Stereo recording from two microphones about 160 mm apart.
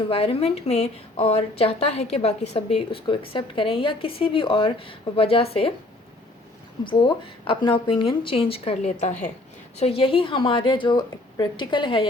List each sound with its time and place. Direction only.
0.1 s a woman's voice: 35° left (ahead or behind)
6.8 s a woman's voice: 30° left (ahead or behind)